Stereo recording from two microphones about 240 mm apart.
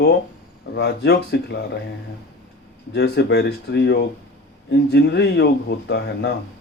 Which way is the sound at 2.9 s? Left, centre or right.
Left.